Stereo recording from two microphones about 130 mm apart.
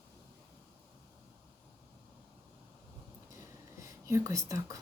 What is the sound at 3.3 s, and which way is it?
Whispering, 25° right (ahead or behind).